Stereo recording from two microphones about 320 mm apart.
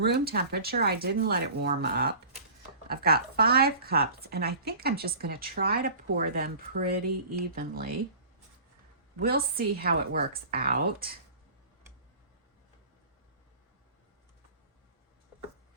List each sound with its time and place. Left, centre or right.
0.0 s speech: right
9.1 s speech: right